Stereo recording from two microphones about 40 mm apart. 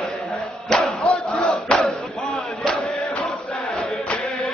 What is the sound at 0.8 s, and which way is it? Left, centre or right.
Battle cry, left.